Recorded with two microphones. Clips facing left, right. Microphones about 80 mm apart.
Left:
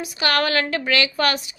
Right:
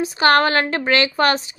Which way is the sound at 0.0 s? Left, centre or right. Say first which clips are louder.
Right 7 dB; right.